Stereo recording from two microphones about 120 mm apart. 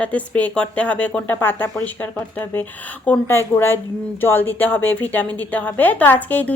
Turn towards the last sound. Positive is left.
turn(degrees=15)  # may be behind; listen again after turning